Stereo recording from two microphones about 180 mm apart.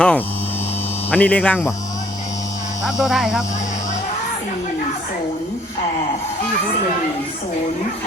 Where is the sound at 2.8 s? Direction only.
Centre (ahead or behind).